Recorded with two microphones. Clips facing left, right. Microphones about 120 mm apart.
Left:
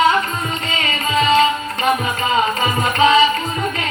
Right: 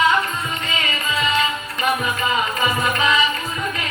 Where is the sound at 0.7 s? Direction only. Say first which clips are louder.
Left 5 dB; 35° left (ahead or behind).